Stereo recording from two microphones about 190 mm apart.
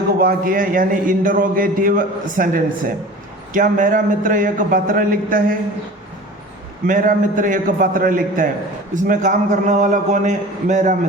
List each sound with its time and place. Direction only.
0.2 s a man's voice: 50° right (ahead or behind)
6.8 s a man's voice: 45° right (ahead or behind)